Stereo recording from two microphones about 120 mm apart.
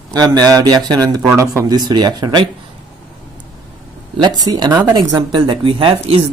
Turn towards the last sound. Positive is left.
turn(degrees=-50)  # may be behind; listen again after turning